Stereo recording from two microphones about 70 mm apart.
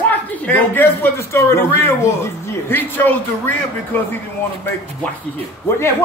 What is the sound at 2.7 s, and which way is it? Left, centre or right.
A man's voice, left.